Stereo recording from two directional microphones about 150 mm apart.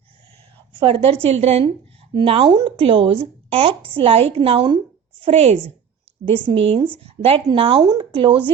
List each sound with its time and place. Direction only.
0.7 s a woman's voice: 35° right (ahead or behind)